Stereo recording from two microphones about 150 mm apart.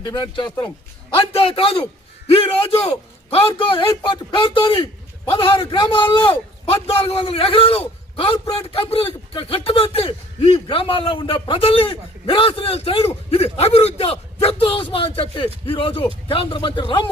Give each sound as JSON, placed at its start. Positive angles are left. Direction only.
{"t": 0.0, "sound": "a man's voice", "side_deg": 30}